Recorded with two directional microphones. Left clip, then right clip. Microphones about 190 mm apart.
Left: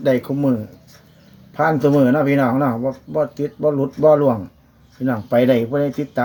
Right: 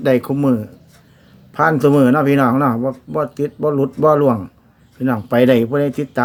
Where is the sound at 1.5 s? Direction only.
20° right (ahead or behind).